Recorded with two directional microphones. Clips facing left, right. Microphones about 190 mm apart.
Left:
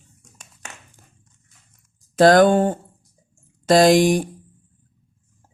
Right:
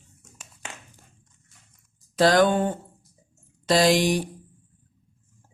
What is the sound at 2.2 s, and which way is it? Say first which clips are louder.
Mantra: left 6 dB; 50° left (ahead or behind).